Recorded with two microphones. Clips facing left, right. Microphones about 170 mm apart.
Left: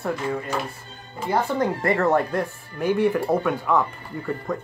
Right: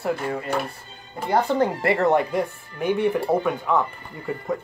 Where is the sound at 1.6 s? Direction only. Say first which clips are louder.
Right 1 dB; 25° right (ahead or behind).